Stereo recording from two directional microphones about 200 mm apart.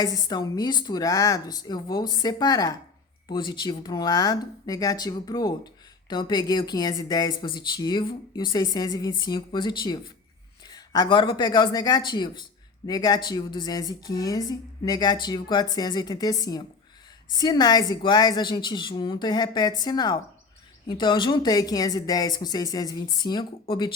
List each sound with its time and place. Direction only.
0.0 s speech: 20° left (ahead or behind)